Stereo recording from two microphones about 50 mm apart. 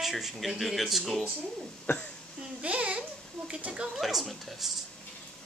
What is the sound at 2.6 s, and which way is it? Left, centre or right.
Babbling, right.